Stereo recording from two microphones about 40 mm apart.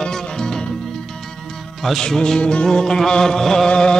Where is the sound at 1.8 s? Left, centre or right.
Centre.